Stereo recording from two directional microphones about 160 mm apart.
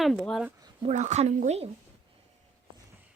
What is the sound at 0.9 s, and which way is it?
Speech, 45° right (ahead or behind).